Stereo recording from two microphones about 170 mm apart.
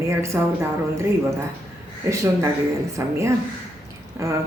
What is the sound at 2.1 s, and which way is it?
Speech, 15° right (ahead or behind).